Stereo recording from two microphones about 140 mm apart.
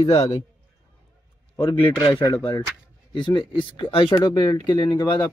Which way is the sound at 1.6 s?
35° left (ahead or behind).